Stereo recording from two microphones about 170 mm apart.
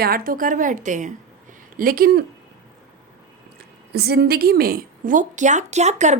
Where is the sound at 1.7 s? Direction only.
60° right (ahead or behind).